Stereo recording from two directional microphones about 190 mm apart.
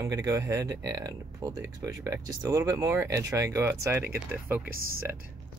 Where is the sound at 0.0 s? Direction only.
15° right (ahead or behind).